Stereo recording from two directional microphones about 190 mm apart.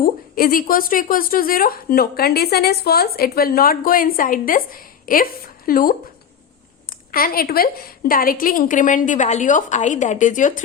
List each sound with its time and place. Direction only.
0.0 s a woman's voice: 50° left (ahead or behind)
7.1 s a woman's voice: 50° left (ahead or behind)